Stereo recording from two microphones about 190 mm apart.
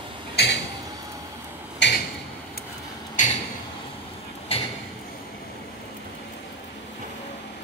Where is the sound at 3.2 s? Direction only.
40° left (ahead or behind).